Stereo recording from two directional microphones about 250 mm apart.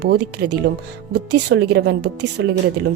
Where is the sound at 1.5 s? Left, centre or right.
Right.